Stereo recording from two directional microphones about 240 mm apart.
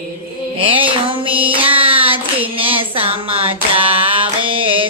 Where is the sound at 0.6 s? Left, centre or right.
Right.